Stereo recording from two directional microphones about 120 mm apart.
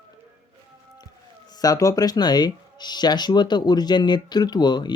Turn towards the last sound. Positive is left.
turn(degrees=40)  # may be behind; listen again after turning